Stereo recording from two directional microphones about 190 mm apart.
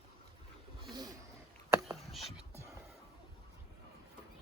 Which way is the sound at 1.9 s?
Centre (ahead or behind).